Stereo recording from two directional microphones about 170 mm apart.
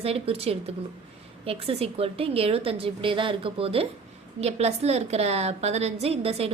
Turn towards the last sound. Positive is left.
turn(degrees=-35)  # may be behind; listen again after turning